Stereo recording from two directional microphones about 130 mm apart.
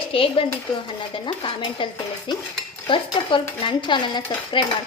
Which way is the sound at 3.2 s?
40° left (ahead or behind).